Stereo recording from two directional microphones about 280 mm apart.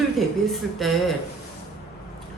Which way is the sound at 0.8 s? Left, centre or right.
Centre.